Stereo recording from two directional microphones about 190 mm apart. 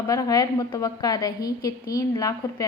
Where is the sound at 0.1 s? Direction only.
20° left (ahead or behind).